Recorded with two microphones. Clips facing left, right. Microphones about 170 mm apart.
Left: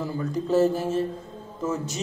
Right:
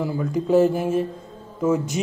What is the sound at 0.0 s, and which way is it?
Speech, 10° right (ahead or behind).